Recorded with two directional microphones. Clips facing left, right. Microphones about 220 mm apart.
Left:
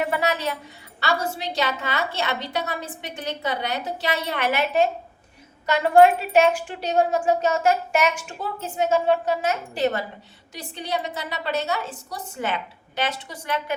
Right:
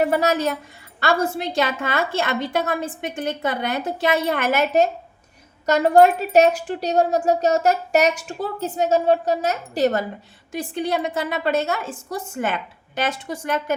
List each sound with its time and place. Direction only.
0.0 s a woman's voice: 40° right (ahead or behind)